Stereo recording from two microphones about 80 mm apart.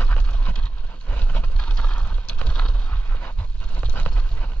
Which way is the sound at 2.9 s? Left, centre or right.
Left.